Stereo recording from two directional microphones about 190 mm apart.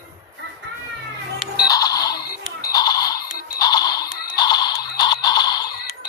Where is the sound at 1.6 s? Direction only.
20° left (ahead or behind).